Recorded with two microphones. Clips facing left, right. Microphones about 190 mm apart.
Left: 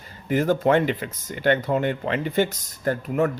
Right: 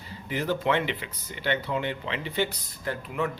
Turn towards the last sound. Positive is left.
turn(degrees=45)  # may be behind; listen again after turning